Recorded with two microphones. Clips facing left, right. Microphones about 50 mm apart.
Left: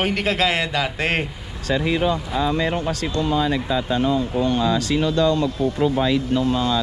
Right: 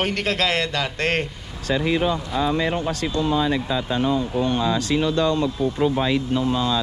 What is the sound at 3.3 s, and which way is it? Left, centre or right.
Speech, left.